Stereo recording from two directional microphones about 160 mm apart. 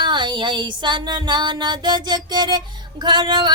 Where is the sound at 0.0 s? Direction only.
30° right (ahead or behind).